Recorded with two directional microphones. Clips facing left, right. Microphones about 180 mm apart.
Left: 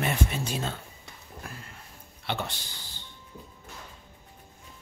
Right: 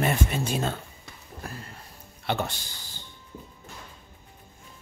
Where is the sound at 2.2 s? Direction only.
45° right (ahead or behind).